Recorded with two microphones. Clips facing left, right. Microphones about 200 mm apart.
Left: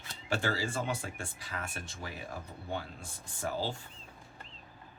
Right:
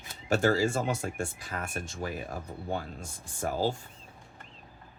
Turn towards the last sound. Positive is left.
turn(degrees=-45)  # may be behind; listen again after turning